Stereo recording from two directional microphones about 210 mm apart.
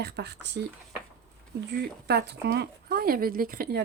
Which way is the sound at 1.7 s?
50° right (ahead or behind).